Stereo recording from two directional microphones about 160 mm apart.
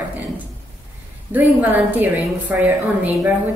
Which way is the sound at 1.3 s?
10° right (ahead or behind).